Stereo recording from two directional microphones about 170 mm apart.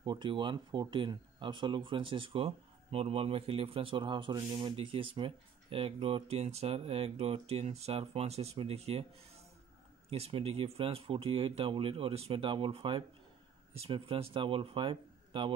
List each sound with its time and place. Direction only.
0.0 s speech: 30° right (ahead or behind)
10.0 s speech: 35° right (ahead or behind)